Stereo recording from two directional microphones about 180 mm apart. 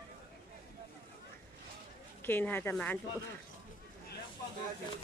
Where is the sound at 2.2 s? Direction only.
10° left (ahead or behind).